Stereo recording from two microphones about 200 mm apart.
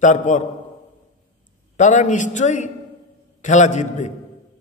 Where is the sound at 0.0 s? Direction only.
40° left (ahead or behind).